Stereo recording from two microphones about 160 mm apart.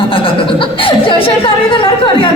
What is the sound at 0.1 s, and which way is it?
Chuckle, 35° left (ahead or behind).